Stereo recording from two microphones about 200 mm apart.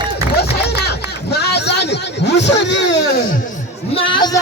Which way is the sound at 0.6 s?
55° left (ahead or behind).